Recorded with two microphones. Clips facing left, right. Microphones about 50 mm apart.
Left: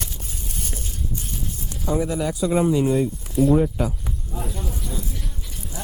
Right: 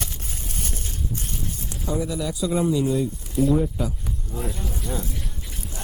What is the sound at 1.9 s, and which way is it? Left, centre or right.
Speech, left.